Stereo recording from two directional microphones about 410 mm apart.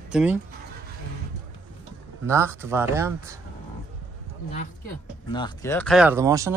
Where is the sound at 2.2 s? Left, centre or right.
Centre.